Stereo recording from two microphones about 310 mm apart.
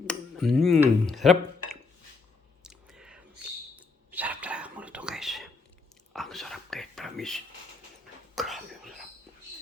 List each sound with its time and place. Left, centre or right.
0.1 s speech: centre
2.6 s chewing: centre
3.8 s whispering: centre
8.4 s cough: centre